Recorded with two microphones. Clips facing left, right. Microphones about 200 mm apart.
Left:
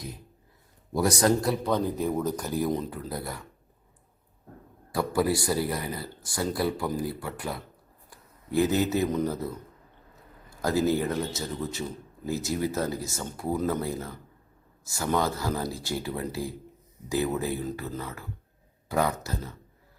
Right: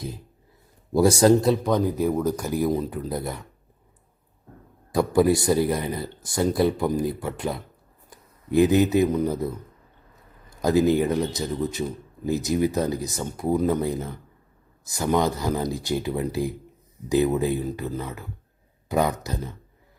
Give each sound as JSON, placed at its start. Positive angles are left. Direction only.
{"t": 0.9, "sound": "a man's voice", "side_deg": -30}
{"t": 4.9, "sound": "speech", "side_deg": -20}
{"t": 10.6, "sound": "a man's voice", "side_deg": -20}